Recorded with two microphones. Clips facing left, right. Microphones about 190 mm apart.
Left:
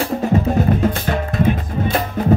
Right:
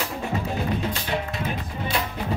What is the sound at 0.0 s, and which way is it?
Music, 45° left (ahead or behind).